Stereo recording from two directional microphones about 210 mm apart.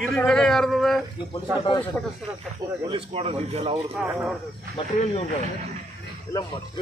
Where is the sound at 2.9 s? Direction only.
30° right (ahead or behind).